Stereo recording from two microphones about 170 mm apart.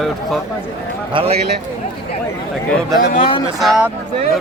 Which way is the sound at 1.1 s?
35° right (ahead or behind).